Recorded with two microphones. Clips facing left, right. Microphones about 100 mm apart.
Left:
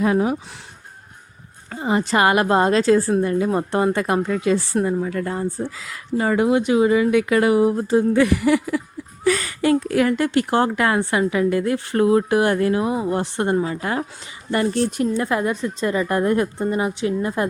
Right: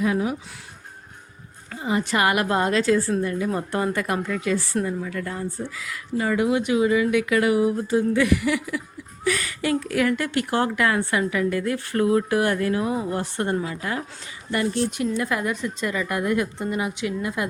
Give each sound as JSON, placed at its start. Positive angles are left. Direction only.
{"t": 0.0, "sound": "a woman's voice", "side_deg": 40}
{"t": 1.7, "sound": "a woman's voice", "side_deg": 35}